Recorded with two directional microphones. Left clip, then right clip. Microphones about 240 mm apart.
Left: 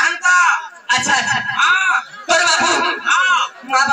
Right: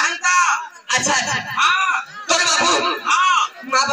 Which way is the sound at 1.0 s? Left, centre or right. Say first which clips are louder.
Left 3 dB; right.